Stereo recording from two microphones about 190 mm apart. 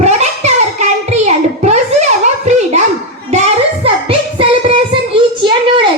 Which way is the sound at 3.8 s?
30° right (ahead or behind).